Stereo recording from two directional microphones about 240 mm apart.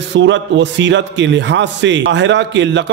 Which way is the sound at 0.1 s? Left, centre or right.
Right.